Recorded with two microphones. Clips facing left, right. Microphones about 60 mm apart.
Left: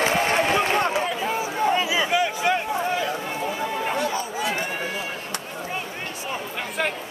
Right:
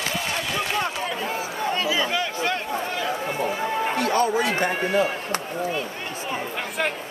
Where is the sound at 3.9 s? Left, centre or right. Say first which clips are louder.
Right 5 dB; right.